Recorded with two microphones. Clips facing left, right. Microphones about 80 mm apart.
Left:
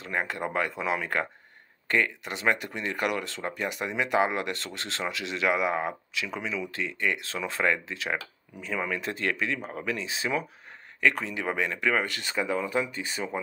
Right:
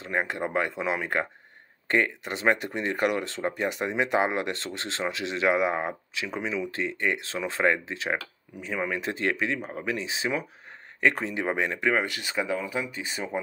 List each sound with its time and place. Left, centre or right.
0.0 s speech: right